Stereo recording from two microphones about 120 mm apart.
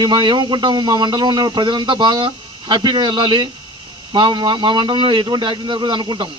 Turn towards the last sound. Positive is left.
turn(degrees=-40)  # may be behind; listen again after turning